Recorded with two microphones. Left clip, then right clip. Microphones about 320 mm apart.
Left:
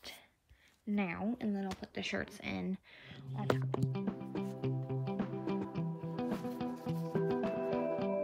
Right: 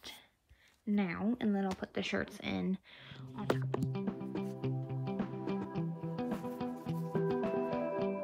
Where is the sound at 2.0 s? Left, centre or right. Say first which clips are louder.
Left 1 dB; centre.